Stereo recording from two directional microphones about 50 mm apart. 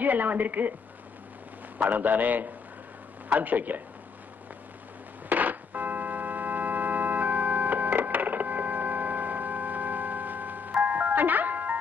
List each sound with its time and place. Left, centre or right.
0.0 s a woman's voice: right
1.9 s a woman's voice: right
5.3 s organ: right